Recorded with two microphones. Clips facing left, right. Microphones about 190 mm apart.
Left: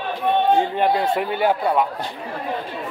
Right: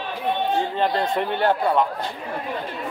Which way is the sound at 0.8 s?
10° left (ahead or behind).